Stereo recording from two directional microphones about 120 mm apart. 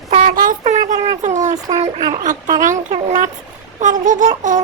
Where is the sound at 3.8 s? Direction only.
90° right.